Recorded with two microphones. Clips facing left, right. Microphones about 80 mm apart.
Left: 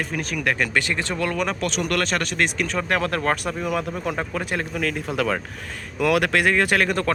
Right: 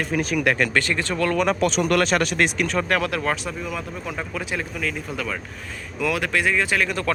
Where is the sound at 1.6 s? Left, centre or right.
Right; by 2.8 s centre.